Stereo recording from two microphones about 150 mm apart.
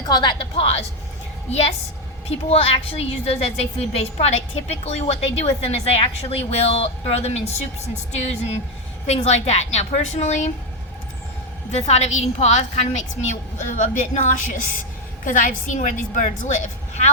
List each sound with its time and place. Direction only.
0.0 s a woman's voice: 30° left (ahead or behind); by 7.5 s 45° left (ahead or behind)
9.0 s a woman's voice: 45° left (ahead or behind)
11.7 s a woman's voice: 45° left (ahead or behind)